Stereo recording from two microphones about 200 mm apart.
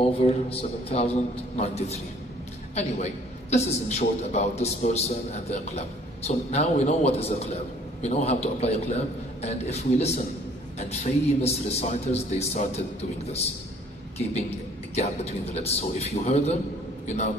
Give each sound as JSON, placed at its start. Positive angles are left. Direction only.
{"t": 0.2, "sound": "a man's voice", "side_deg": 30}
{"t": 15.0, "sound": "a man's voice", "side_deg": 30}